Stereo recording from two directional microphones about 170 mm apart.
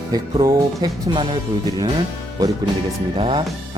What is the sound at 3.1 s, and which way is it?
Speech, 30° right (ahead or behind).